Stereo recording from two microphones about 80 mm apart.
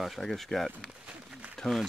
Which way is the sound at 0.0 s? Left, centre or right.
Centre.